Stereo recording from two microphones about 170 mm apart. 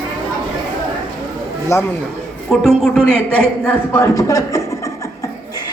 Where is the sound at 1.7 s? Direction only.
15° left (ahead or behind).